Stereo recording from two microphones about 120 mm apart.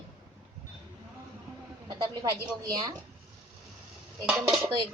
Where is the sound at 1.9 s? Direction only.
35° right (ahead or behind).